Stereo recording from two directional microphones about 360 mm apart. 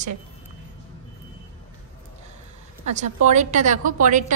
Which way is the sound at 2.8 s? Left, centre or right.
Centre.